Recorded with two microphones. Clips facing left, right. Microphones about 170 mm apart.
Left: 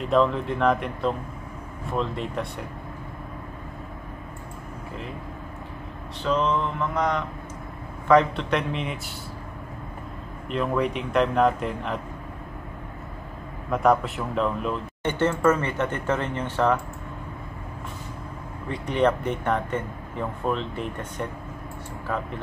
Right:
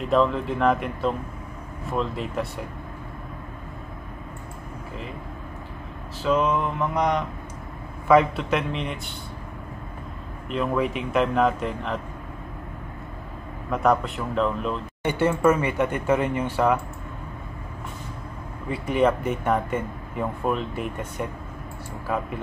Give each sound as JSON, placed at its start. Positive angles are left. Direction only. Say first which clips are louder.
{"t": 0.0, "sound": "speech", "louder": "even", "side_deg": 0}
{"t": 6.2, "sound": "speech", "louder": "right 2 dB", "side_deg": -10}
{"t": 8.1, "sound": "speech", "louder": "right 1 dB", "side_deg": -5}
{"t": 10.5, "sound": "speech", "louder": "even", "side_deg": 0}
{"t": 13.7, "sound": "speech", "louder": "left 1 dB", "side_deg": 0}
{"t": 15.0, "sound": "speech", "louder": "right 1 dB", "side_deg": -10}
{"t": 18.7, "sound": "speech", "louder": "right 1 dB", "side_deg": -5}